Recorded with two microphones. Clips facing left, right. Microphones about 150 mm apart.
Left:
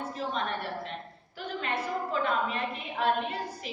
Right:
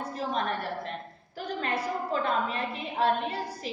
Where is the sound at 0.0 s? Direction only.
40° right (ahead or behind).